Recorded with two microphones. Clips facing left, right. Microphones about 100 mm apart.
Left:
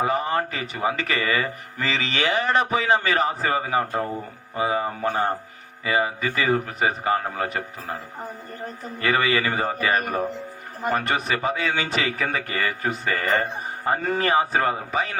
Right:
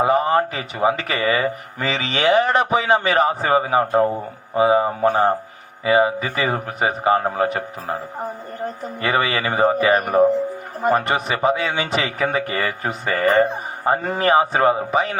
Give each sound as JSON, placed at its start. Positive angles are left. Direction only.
{"t": 0.0, "sound": "a man's voice", "side_deg": -25}
{"t": 9.0, "sound": "a man's voice", "side_deg": -25}
{"t": 10.8, "sound": "a man's voice", "side_deg": -30}